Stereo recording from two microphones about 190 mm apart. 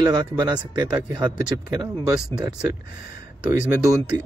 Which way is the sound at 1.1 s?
20° right (ahead or behind).